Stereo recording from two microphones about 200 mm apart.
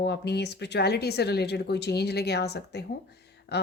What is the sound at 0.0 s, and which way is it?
Speech, 55° left (ahead or behind).